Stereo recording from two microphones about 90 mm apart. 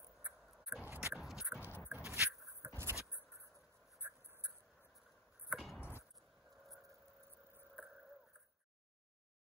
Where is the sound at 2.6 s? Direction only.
25° right (ahead or behind).